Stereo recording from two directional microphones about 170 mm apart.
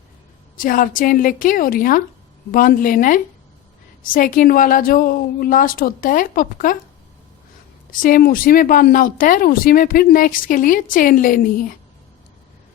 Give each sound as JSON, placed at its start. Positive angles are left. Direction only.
{"t": 0.5, "sound": "a woman's voice", "side_deg": 55}
{"t": 8.0, "sound": "speech", "side_deg": 55}